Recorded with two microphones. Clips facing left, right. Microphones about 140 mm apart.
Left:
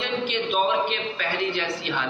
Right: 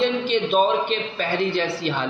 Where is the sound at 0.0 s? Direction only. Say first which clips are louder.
Right 6 dB; 35° right (ahead or behind).